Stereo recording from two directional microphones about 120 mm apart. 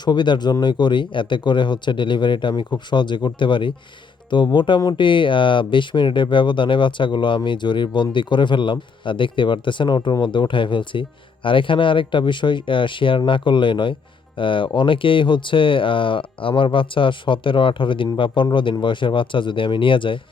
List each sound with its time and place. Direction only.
0.0 s speech: 40° left (ahead or behind)